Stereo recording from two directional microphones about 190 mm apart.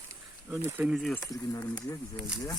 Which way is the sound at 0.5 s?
10° right (ahead or behind).